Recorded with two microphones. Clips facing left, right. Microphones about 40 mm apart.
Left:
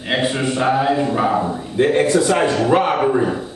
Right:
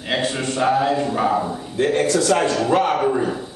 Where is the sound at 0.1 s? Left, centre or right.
Centre.